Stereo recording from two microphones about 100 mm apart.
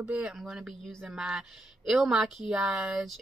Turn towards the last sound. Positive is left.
turn(degrees=-5)  # may be behind; listen again after turning